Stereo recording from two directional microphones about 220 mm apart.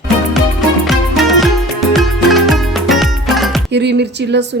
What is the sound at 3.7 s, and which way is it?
Speech, 50° right (ahead or behind).